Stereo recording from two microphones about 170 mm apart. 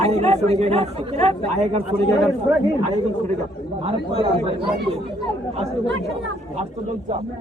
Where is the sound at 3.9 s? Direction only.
35° right (ahead or behind).